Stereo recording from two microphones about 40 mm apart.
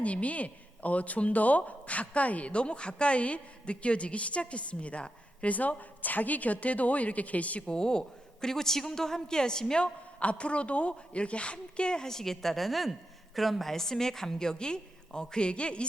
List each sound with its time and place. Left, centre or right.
0.0 s a woman's voice: left
7.7 s a man's voice: centre